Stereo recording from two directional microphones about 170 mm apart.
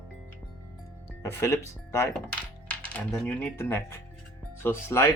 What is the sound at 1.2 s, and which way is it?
Speech, 15° left (ahead or behind).